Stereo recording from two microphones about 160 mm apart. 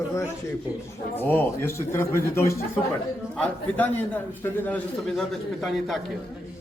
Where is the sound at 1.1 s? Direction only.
10° left (ahead or behind).